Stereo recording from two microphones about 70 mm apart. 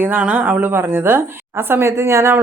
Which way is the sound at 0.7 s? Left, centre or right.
Right.